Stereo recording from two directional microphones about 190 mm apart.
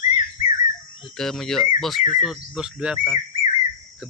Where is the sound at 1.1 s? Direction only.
Centre (ahead or behind).